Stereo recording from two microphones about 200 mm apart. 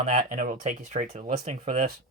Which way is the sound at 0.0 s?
40° right (ahead or behind).